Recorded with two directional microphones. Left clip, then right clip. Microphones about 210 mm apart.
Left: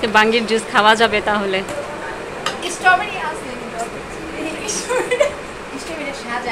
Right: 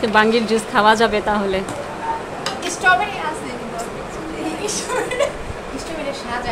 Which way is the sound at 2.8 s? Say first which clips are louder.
Left 1 dB; 20° right (ahead or behind).